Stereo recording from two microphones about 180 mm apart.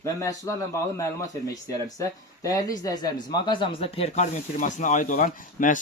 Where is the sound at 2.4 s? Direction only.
20° left (ahead or behind).